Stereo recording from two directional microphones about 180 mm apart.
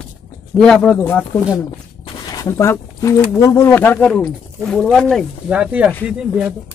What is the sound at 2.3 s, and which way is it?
Speech, 15° left (ahead or behind).